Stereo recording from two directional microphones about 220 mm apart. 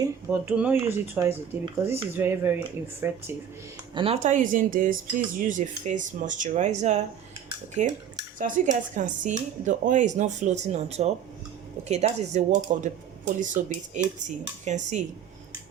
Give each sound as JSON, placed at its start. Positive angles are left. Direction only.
{"t": 0.0, "sound": "speech", "side_deg": -10}
{"t": 3.9, "sound": "speech", "side_deg": -25}